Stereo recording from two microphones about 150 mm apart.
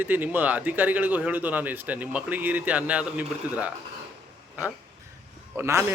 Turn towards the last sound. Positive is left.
turn(degrees=-20)  # may be behind; listen again after turning